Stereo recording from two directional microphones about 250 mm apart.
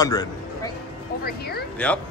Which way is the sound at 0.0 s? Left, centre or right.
Centre.